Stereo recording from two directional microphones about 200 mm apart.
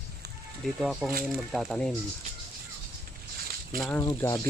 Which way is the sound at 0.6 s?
Centre (ahead or behind).